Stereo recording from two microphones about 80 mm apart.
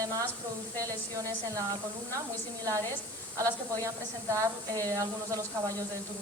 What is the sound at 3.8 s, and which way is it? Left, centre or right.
A woman's voice, right.